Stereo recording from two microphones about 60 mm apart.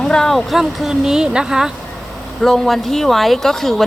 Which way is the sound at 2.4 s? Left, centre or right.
Centre.